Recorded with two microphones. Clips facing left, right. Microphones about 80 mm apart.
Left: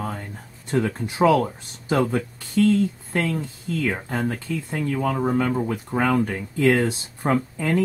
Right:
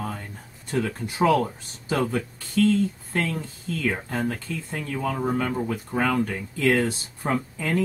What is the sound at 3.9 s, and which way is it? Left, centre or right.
Speech, centre.